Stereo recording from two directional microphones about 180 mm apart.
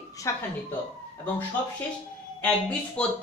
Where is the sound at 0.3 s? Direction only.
15° left (ahead or behind).